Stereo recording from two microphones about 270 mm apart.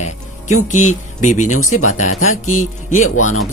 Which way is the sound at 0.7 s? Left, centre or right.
Left.